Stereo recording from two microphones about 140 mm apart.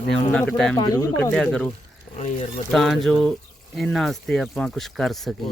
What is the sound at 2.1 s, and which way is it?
Speech, 55° left (ahead or behind).